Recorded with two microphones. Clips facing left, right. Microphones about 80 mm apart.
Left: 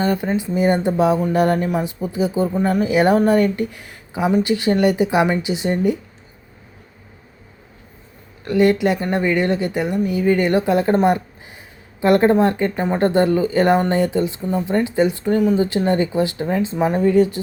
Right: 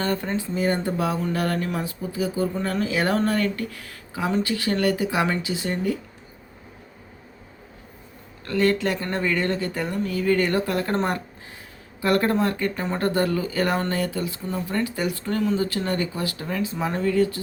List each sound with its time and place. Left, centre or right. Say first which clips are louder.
0.0 s speech: left 6 dB; centre
8.4 s speech: left 6 dB; centre